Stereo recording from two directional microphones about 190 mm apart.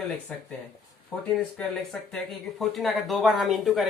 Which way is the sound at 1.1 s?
10° left (ahead or behind).